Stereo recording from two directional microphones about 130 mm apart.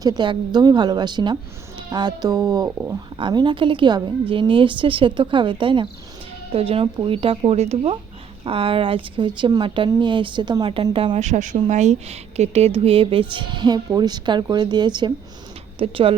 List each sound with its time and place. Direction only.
0.0 s speech: 35° right (ahead or behind)
2.7 s speech: 20° right (ahead or behind)
3.2 s speech: 35° right (ahead or behind)
11.2 s speech: 70° right (ahead or behind); by 16.1 s 45° right (ahead or behind)